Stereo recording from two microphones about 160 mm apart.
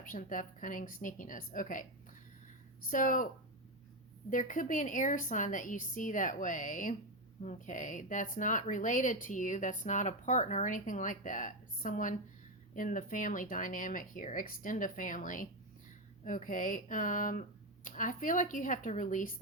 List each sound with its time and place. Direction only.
0.0 s speech: 60° left (ahead or behind)
2.9 s speech: 55° left (ahead or behind)
4.3 s speech: 55° left (ahead or behind)